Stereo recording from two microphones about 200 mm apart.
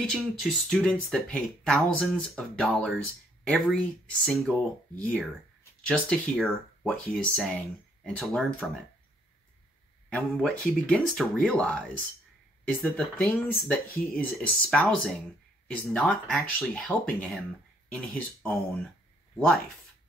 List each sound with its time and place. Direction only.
0.0 s speech: centre (ahead or behind)
10.0 s speech: 5° left (ahead or behind)
12.8 s speech: 10° left (ahead or behind)